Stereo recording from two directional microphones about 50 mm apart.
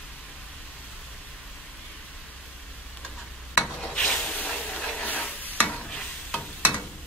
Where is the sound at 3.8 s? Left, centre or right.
Left.